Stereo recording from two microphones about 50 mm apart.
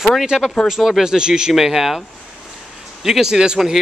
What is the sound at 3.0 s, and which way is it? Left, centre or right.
Speech, centre.